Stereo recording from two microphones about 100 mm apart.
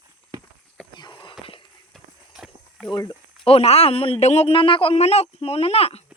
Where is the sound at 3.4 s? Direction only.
80° left.